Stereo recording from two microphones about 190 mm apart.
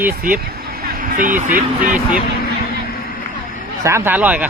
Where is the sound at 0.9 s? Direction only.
45° right (ahead or behind).